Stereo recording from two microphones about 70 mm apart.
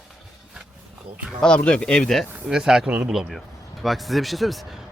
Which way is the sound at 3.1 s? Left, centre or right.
Centre.